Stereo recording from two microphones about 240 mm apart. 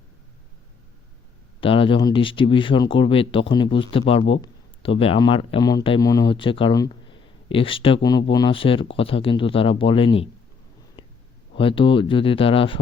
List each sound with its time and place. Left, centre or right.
1.6 s a man's voice: left
11.5 s a man's voice: left